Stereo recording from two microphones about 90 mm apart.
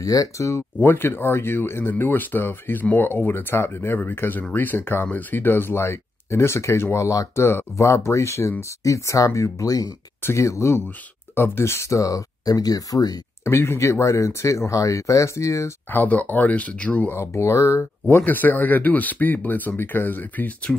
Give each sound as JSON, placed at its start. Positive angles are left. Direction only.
{"t": 0.0, "sound": "speech", "side_deg": 40}
{"t": 0.7, "sound": "speech", "side_deg": 25}
{"t": 13.4, "sound": "speech", "side_deg": 30}
{"t": 15.9, "sound": "speech", "side_deg": 20}
{"t": 17.1, "sound": "speech", "side_deg": 30}
{"t": 18.1, "sound": "speech", "side_deg": 20}